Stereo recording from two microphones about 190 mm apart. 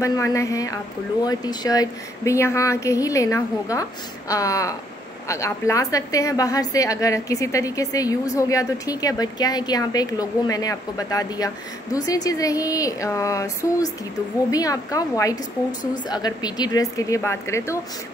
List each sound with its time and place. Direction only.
0.0 s a woman's voice: 15° left (ahead or behind)